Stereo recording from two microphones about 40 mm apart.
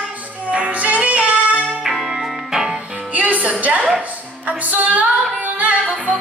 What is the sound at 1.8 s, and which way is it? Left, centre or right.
Music, centre.